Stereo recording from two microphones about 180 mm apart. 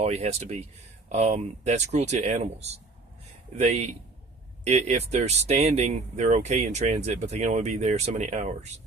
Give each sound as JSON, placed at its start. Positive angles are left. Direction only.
{"t": 0.0, "sound": "speech", "side_deg": -35}